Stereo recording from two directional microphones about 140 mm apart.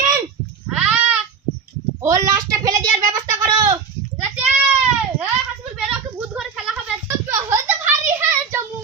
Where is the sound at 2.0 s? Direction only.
25° right (ahead or behind).